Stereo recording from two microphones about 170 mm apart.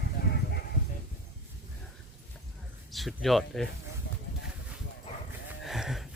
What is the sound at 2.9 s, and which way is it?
Speech, centre (ahead or behind).